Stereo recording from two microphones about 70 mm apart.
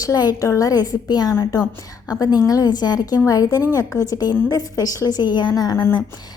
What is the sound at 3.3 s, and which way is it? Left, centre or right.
A woman's voice, left.